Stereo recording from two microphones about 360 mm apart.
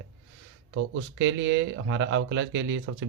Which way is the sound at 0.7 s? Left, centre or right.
Right.